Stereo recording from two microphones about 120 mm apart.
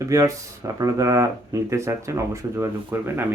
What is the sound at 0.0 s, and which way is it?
Speech, 25° right (ahead or behind).